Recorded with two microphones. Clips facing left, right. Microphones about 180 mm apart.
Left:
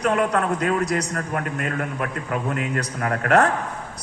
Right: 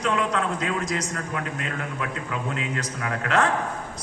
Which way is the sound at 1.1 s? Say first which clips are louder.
Left 4 dB; 50° left (ahead or behind).